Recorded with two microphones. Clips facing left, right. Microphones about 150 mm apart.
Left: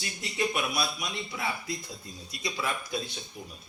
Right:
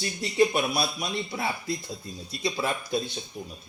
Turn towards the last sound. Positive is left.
turn(degrees=-35)  # may be behind; listen again after turning